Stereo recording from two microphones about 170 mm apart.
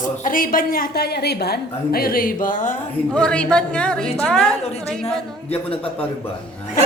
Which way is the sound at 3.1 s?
5° left (ahead or behind).